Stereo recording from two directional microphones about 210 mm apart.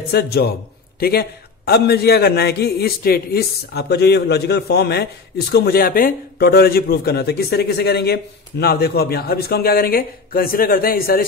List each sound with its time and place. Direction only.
0.1 s a man's voice: 50° left (ahead or behind)